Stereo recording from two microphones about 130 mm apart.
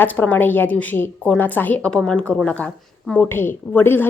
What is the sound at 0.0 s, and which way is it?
A woman's voice, 15° left (ahead or behind).